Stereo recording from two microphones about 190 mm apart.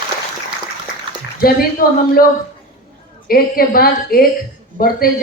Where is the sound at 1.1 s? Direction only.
25° right (ahead or behind).